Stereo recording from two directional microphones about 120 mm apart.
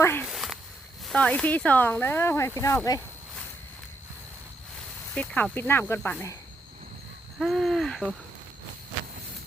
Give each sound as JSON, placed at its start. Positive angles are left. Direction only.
{"t": 0.0, "sound": "speech", "side_deg": 20}
{"t": 0.3, "sound": "walk", "side_deg": 0}
{"t": 1.0, "sound": "speech", "side_deg": 10}
{"t": 5.1, "sound": "speech", "side_deg": 10}
{"t": 7.3, "sound": "hoot", "side_deg": 0}